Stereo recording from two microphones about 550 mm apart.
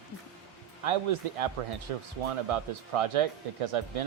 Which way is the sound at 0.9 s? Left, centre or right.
Right.